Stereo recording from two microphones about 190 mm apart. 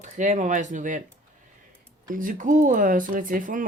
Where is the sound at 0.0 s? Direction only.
40° right (ahead or behind).